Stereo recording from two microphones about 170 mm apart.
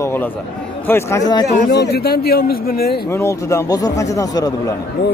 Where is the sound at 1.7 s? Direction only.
75° left (ahead or behind).